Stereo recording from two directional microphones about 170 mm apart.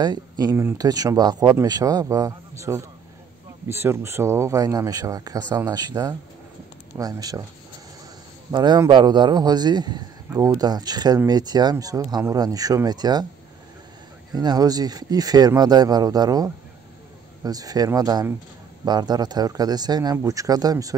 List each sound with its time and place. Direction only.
0.0 s speech: 25° right (ahead or behind)
8.5 s speech: 25° right (ahead or behind)
14.3 s speech: 25° right (ahead or behind)